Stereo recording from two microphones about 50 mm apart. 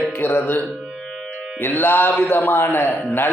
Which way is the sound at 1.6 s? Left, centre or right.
Left.